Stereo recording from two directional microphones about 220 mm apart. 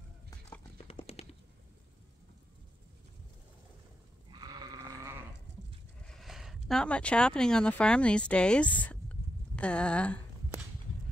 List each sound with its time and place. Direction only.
0.8 s a sound: 30° left (ahead or behind)
4.3 s sheep: 20° right (ahead or behind)
5.5 s goat: 55° right (ahead or behind)
6.0 s speech: centre (ahead or behind)